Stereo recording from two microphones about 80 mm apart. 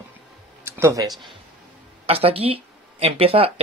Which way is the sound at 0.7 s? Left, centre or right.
Right.